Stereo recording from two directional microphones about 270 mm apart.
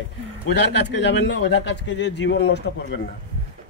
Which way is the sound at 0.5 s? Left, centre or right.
Left.